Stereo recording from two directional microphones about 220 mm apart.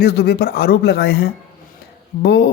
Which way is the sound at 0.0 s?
50° left (ahead or behind).